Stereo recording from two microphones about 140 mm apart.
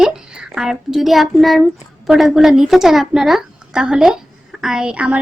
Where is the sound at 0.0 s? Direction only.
5° right (ahead or behind).